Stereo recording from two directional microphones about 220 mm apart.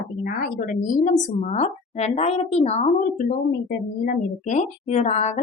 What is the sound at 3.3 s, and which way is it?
A woman's voice, 40° left (ahead or behind).